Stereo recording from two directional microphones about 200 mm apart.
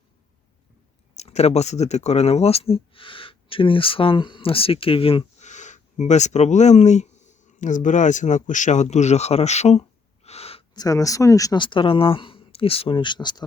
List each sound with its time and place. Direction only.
1.1 s speech: 35° left (ahead or behind)
10.2 s a sound: 30° left (ahead or behind)
10.8 s speech: 15° left (ahead or behind)